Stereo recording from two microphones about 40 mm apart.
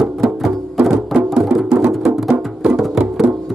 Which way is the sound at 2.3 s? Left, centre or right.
Right.